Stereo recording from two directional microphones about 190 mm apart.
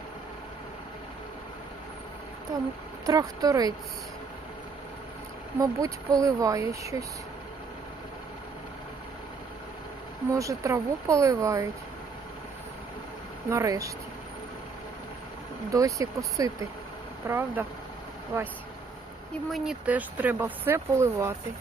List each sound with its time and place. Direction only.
3.1 s speech: 20° right (ahead or behind)
5.5 s speech: 15° right (ahead or behind)
10.3 s speech: 15° right (ahead or behind)
13.5 s speech: 15° right (ahead or behind)
15.7 s speech: 15° right (ahead or behind)
19.5 s speech: centre (ahead or behind)